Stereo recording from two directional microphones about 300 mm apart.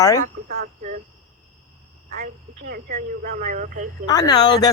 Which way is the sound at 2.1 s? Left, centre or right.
Right.